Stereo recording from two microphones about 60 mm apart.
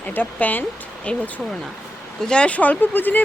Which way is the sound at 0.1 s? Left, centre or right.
Left.